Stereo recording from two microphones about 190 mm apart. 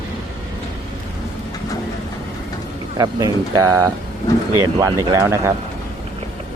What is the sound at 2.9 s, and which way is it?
Speech, 20° right (ahead or behind).